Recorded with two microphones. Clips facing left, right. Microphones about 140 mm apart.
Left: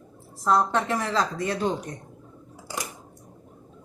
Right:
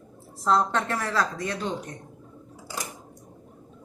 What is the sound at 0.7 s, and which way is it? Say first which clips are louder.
Speech: left 2 dB; 15° left (ahead or behind).